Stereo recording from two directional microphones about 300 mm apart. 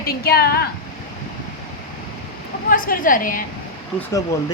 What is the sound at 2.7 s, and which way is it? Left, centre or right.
Speech, left.